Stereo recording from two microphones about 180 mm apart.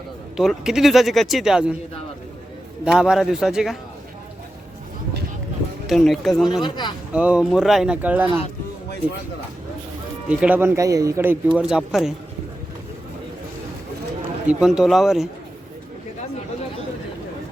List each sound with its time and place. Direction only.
0.3 s speech: 5° right (ahead or behind)
2.8 s speech: 5° right (ahead or behind)
5.9 s speech: centre (ahead or behind)
6.6 s speech: 25° left (ahead or behind)
7.1 s speech: 5° right (ahead or behind)
10.2 s speech: 10° right (ahead or behind)
14.4 s speech: 5° right (ahead or behind)